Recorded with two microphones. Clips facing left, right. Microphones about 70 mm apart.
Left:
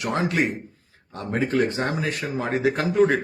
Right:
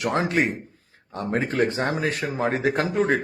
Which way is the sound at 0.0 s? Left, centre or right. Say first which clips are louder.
Right 1 dB; right.